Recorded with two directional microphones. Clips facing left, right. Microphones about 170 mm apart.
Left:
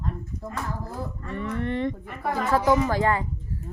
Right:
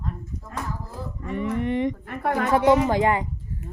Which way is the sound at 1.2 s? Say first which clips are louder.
Right 6 dB; 15° right (ahead or behind).